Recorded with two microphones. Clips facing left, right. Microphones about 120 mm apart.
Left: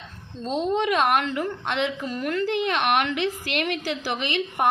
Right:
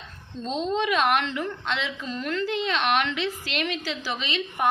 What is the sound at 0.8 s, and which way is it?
A woman's voice, 45° left (ahead or behind).